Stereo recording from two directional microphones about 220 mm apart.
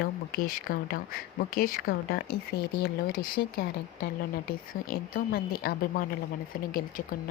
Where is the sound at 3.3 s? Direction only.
45° left (ahead or behind).